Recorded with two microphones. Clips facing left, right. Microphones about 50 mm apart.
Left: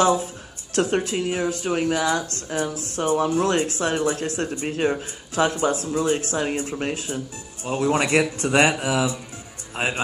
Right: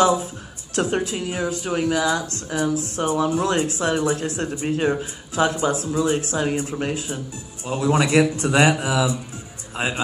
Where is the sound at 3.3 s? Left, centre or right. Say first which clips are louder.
Even; left.